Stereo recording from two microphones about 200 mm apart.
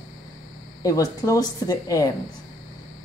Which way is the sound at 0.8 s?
15° left (ahead or behind).